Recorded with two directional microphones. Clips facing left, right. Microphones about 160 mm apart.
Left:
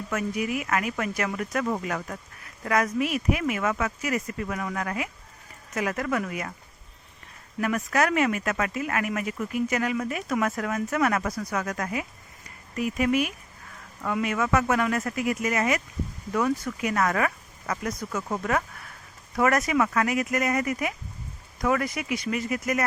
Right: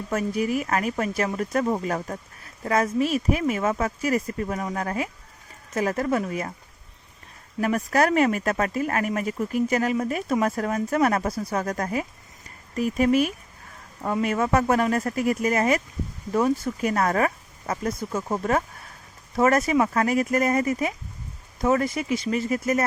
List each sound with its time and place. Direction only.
0.1 s speech: 35° right (ahead or behind)
7.6 s speech: 35° right (ahead or behind)